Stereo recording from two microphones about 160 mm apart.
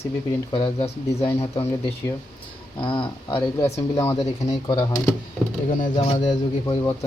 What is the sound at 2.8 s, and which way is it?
Speech, 30° left (ahead or behind).